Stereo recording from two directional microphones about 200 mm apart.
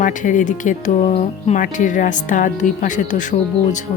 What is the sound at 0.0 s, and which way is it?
A woman's voice, 40° left (ahead or behind).